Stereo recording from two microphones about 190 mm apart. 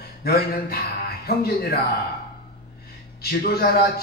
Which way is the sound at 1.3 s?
55° left (ahead or behind).